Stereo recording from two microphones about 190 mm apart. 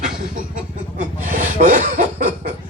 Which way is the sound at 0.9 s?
45° right (ahead or behind).